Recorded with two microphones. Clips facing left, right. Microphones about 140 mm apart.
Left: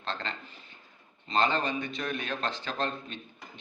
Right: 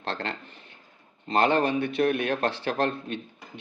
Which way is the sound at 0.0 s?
70° right (ahead or behind).